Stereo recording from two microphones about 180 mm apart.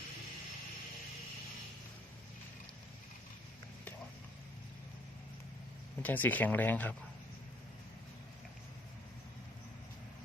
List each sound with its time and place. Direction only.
6.0 s speech: 10° left (ahead or behind)